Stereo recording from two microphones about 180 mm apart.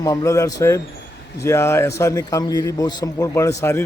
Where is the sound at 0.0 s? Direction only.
20° left (ahead or behind).